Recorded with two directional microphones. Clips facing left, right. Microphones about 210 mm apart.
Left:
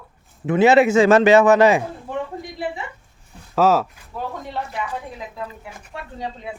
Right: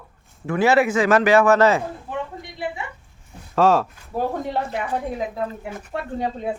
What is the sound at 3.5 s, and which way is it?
Speech, 5° left (ahead or behind).